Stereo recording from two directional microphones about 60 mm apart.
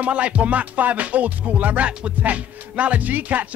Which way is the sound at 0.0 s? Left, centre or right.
Right.